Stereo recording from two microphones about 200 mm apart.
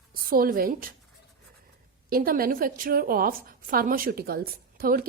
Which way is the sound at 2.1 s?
45° right (ahead or behind).